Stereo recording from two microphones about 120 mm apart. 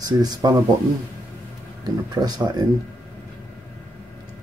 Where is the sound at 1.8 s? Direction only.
35° right (ahead or behind).